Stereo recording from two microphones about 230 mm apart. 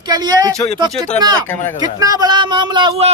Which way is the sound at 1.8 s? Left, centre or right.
Centre.